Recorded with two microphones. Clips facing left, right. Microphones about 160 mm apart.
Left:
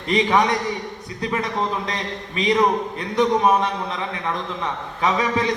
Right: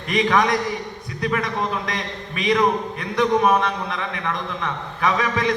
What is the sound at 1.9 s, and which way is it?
A man's voice, 25° left (ahead or behind).